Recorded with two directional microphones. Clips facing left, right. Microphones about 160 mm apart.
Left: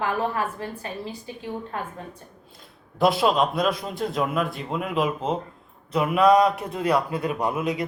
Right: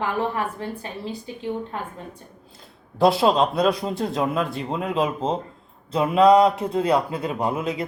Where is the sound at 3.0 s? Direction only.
30° right (ahead or behind).